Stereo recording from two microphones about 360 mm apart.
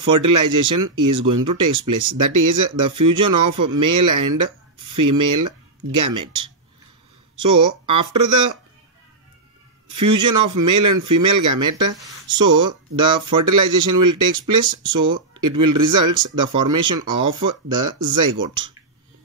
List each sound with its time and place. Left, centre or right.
0.0 s speech: right
9.8 s speech: right
13.0 s speech: centre
13.4 s speech: right
15.0 s speech: centre
15.4 s speech: right